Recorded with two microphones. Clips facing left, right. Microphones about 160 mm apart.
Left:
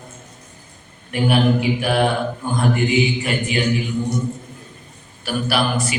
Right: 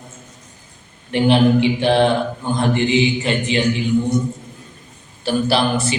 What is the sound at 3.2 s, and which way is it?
Speech, 25° right (ahead or behind).